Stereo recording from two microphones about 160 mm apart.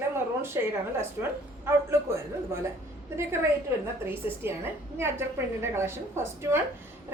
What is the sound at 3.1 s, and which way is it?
A woman's voice, 15° right (ahead or behind).